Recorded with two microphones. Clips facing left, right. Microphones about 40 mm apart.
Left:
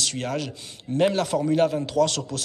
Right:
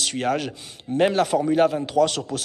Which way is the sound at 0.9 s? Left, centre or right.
Centre.